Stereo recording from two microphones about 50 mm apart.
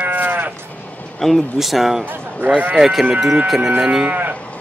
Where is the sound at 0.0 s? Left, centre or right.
Right.